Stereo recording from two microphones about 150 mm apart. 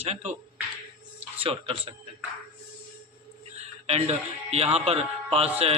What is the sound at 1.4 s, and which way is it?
Speech, 40° right (ahead or behind).